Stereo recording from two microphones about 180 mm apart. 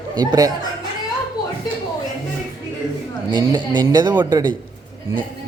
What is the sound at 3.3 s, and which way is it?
Speech, 20° right (ahead or behind).